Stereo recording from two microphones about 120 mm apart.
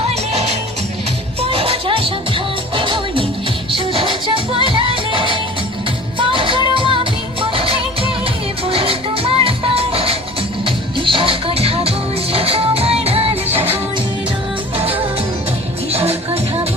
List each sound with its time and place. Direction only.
1.4 s music: 50° right (ahead or behind)
15.9 s music: 55° right (ahead or behind)